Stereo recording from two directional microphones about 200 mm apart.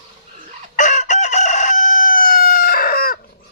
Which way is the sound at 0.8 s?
40° left (ahead or behind).